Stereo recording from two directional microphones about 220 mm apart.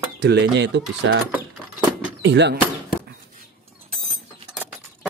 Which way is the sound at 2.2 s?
50° right (ahead or behind).